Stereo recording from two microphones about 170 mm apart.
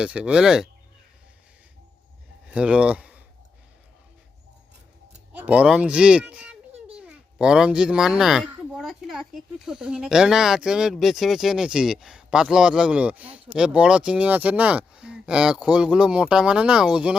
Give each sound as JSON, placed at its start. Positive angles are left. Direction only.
{"t": 0.0, "sound": "speech", "side_deg": -5}
{"t": 2.5, "sound": "speech", "side_deg": -5}
{"t": 5.4, "sound": "speech", "side_deg": -5}